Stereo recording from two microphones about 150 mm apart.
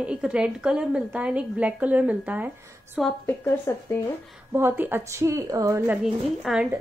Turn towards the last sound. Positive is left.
turn(degrees=-5)  # may be behind; listen again after turning